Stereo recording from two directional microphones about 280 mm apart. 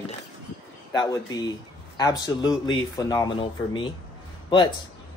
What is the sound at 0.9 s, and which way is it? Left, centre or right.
A man's voice, centre.